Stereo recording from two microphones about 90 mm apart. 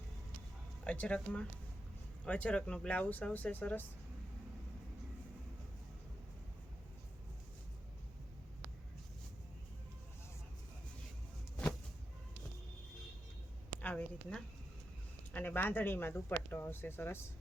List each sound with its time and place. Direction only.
0.9 s speech: 15° left (ahead or behind)
13.8 s a sound: 15° left (ahead or behind)
15.3 s speech: 20° left (ahead or behind)